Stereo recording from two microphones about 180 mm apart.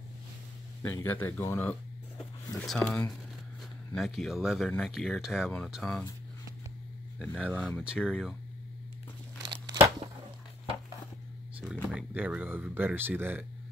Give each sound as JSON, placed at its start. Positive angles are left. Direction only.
{"t": 0.8, "sound": "speech", "side_deg": 10}
{"t": 2.8, "sound": "speech", "side_deg": 10}
{"t": 7.2, "sound": "speech", "side_deg": 5}
{"t": 7.8, "sound": "speech", "side_deg": -5}
{"t": 9.4, "sound": "crumpling", "side_deg": -25}
{"t": 11.5, "sound": "speech", "side_deg": -5}